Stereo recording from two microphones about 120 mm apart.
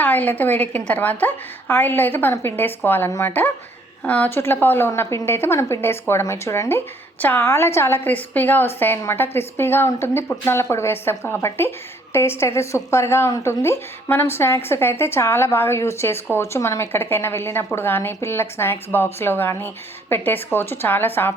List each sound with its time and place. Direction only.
0.0 s a woman's voice: 15° left (ahead or behind)
4.0 s a woman's voice: 10° left (ahead or behind)